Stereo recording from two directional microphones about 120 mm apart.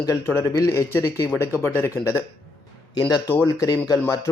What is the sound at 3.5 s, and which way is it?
Speech, 30° left (ahead or behind).